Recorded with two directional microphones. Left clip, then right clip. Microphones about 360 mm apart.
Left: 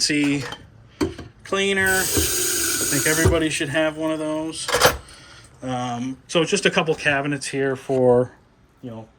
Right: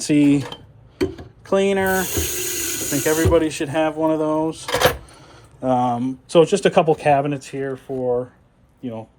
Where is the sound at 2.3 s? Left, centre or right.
Centre.